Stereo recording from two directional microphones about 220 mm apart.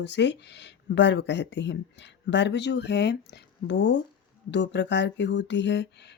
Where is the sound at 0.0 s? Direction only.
50° left (ahead or behind).